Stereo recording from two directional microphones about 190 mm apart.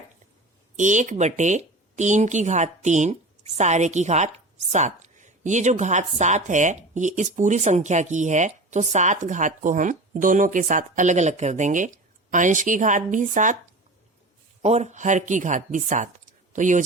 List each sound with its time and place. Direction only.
0.8 s speech: 40° right (ahead or behind)
14.6 s speech: 35° right (ahead or behind)